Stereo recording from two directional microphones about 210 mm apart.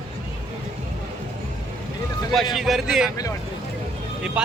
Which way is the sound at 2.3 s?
Centre (ahead or behind).